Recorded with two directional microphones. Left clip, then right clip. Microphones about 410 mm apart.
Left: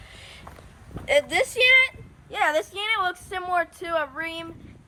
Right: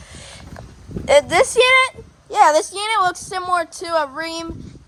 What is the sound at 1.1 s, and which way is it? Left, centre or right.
Speech, centre.